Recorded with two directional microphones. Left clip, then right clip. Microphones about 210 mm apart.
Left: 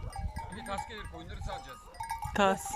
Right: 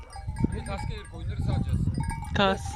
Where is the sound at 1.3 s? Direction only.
10° right (ahead or behind).